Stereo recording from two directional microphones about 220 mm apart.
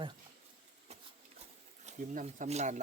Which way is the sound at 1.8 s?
35° right (ahead or behind).